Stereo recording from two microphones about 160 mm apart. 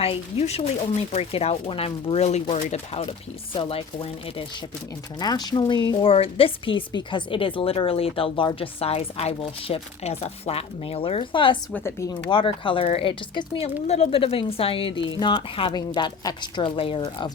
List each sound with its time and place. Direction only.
0.0 s speech: 40° left (ahead or behind)
5.2 s speech: 25° left (ahead or behind)
11.7 s speech: 15° left (ahead or behind)
12.3 s speech: 30° left (ahead or behind)